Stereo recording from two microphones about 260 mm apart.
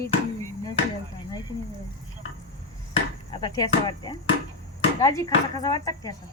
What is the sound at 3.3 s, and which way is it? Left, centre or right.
Speech, centre.